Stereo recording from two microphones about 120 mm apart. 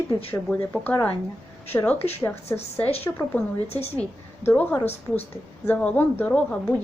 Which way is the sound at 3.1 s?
20° left (ahead or behind).